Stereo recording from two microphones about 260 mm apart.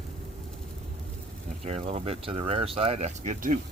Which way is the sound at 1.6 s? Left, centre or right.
Right.